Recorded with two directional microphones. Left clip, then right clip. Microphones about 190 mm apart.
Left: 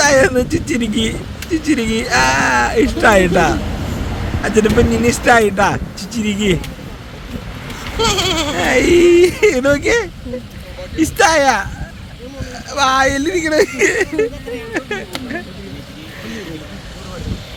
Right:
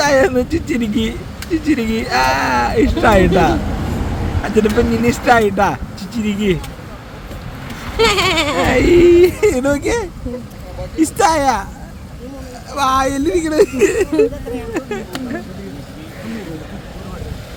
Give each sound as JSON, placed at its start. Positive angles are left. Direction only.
{"t": 0.0, "sound": "speech", "side_deg": -5}
{"t": 7.9, "sound": "goat", "side_deg": -25}
{"t": 8.5, "sound": "speech", "side_deg": -5}
{"t": 12.7, "sound": "speech", "side_deg": -5}